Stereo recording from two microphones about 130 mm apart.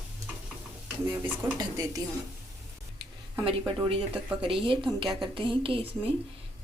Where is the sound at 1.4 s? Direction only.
20° right (ahead or behind).